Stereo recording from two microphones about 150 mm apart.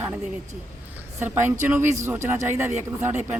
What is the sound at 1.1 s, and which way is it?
A man's voice, 15° right (ahead or behind).